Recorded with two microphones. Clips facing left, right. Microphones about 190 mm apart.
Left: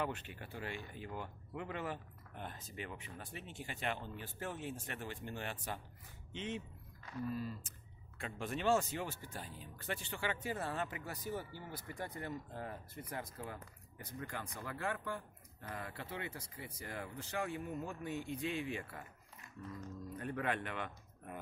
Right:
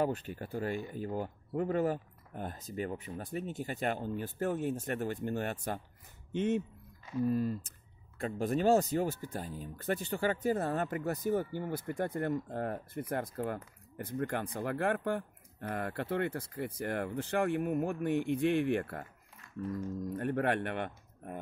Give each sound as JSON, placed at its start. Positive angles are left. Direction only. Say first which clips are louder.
{"t": 0.0, "sound": "speech", "louder": "right 8 dB", "side_deg": -40}
{"t": 20.0, "sound": "speech", "louder": "right 10 dB", "side_deg": -45}
{"t": 20.2, "sound": "speech", "louder": "right 7 dB", "side_deg": -60}